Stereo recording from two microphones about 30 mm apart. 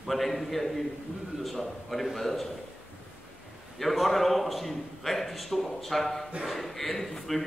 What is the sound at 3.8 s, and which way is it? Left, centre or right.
A man's voice, centre.